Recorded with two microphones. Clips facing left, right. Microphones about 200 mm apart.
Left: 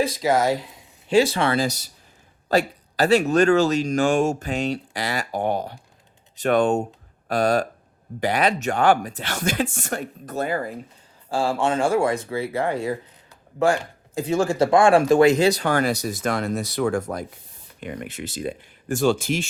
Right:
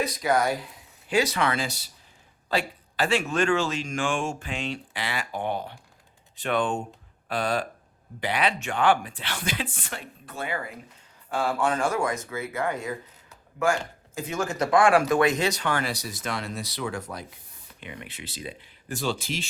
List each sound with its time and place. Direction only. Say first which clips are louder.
0.0 s speech: left 4 dB; 25° left (ahead or behind)
11.3 s speech: left 3 dB; 30° left (ahead or behind); by 19.5 s 50° left (ahead or behind)